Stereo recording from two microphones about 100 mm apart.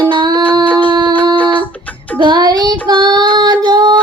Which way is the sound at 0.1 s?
50° right (ahead or behind).